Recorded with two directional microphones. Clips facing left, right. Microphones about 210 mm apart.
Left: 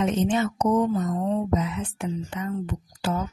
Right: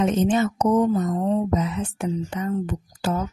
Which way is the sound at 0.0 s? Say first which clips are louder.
Right 3 dB; 40° right (ahead or behind).